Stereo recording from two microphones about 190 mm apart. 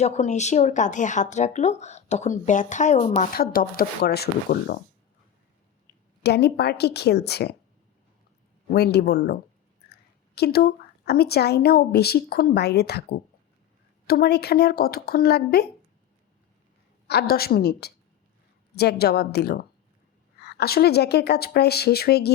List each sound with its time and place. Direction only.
0.0 s speech: 35° left (ahead or behind); by 4.8 s 55° left (ahead or behind)
6.2 s a woman's voice: 60° left (ahead or behind)
8.7 s a woman's voice: 60° left (ahead or behind)
17.1 s a woman's voice: 55° left (ahead or behind)